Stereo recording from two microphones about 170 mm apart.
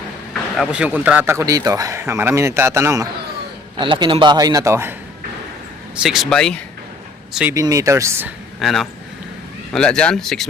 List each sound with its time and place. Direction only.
0.5 s a man's voice: 5° right (ahead or behind)
3.8 s a man's voice: 25° right (ahead or behind)
6.0 s speech: centre (ahead or behind)
7.5 s a man's voice: 20° right (ahead or behind)
8.5 s speech: centre (ahead or behind)